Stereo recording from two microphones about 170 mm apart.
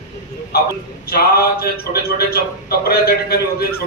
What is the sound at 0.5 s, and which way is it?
A man's voice, 65° left (ahead or behind).